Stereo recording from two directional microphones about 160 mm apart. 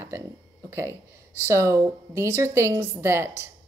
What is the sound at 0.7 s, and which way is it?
A woman's voice, 15° right (ahead or behind).